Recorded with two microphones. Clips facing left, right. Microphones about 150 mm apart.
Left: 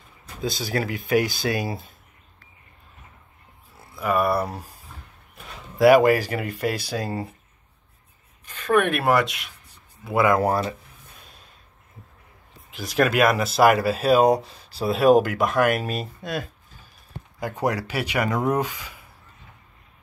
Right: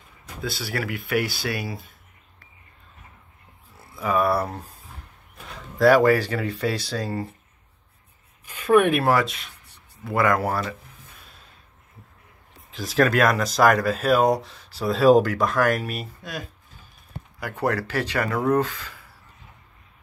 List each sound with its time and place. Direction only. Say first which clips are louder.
0.4 s speech: left 3 dB; 20° left (ahead or behind)
3.9 s speech: even; 5° left (ahead or behind)
8.5 s speech: right 3 dB; 10° right (ahead or behind)
10.0 s speech: left 2 dB; 10° left (ahead or behind)
10.5 s speech: left 3 dB; 25° left (ahead or behind)
12.7 s speech: even; centre (ahead or behind); by 16.1 s 20° left (ahead or behind)
16.1 s speech: left 6 dB; 55° left (ahead or behind)
17.4 s speech: even; 15° left (ahead or behind)